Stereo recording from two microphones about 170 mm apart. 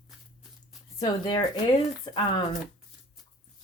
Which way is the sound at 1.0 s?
25° left (ahead or behind).